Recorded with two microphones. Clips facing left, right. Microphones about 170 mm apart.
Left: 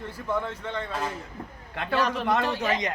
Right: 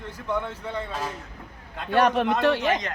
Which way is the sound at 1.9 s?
60° right (ahead or behind).